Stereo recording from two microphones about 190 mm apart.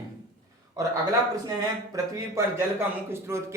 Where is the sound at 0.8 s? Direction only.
20° right (ahead or behind).